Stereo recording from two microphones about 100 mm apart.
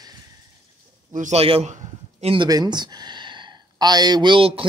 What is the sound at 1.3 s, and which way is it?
Speech, 80° right.